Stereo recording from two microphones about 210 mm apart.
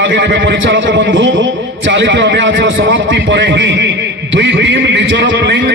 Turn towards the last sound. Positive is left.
turn(degrees=-55)  # may be behind; listen again after turning